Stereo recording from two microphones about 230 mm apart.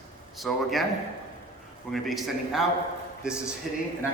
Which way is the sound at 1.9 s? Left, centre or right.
Centre.